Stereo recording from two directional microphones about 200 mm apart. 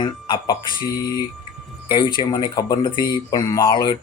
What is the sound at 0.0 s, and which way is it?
Speech, 25° left (ahead or behind).